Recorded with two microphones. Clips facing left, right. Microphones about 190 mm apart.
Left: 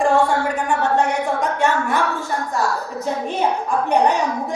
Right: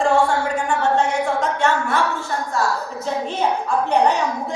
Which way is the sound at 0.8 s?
15° left (ahead or behind).